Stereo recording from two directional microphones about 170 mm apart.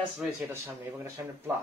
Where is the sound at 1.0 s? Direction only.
15° right (ahead or behind).